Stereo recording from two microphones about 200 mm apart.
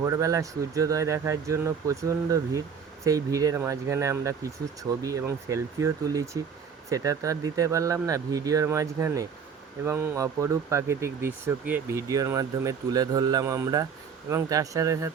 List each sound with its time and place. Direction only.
0.0 s speech: 15° right (ahead or behind)